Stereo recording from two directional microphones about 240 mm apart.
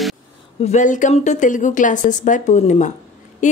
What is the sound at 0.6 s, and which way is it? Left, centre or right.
A woman's voice, left.